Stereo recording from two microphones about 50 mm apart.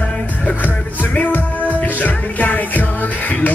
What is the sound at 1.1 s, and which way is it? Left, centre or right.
Music, left.